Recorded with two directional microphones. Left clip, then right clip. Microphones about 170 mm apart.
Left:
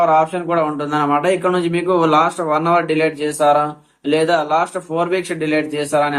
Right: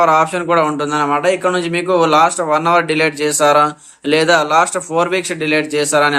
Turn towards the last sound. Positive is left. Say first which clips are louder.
# right 4 dB
turn(degrees=-35)  # may be behind; listen again after turning